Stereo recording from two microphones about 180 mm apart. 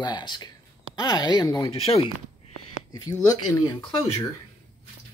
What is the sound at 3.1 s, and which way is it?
Speech, 20° left (ahead or behind).